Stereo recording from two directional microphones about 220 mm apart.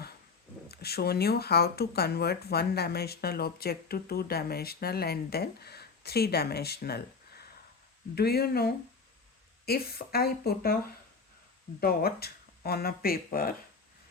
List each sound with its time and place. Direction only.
0.7 s speech: 45° left (ahead or behind)
11.8 s speech: 45° left (ahead or behind)